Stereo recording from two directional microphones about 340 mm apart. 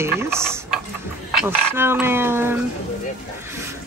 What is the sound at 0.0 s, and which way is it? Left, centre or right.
Stir, centre.